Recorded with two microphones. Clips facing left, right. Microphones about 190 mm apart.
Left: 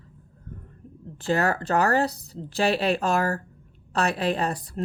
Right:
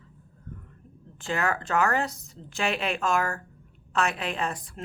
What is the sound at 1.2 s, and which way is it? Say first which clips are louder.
Speech: left 5 dB; 35° left (ahead or behind).